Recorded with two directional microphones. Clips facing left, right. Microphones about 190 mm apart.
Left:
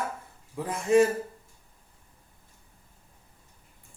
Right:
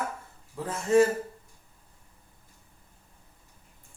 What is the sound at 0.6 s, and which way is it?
Speech, 15° left (ahead or behind).